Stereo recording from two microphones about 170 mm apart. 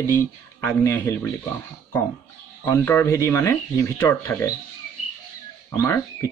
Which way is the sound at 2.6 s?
15° left (ahead or behind).